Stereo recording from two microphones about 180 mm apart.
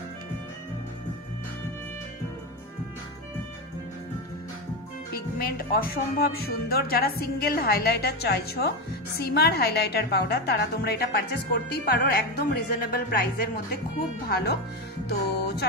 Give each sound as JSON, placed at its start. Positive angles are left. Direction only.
{"t": 5.1, "sound": "a woman's voice", "side_deg": 55}